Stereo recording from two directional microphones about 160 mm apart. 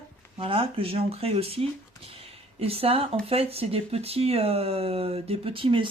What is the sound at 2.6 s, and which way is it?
Speech, 40° right (ahead or behind).